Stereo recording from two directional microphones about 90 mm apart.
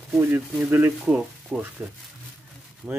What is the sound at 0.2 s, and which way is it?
Speech, 25° right (ahead or behind).